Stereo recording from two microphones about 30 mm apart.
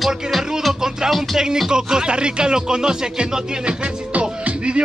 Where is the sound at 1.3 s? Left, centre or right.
Right.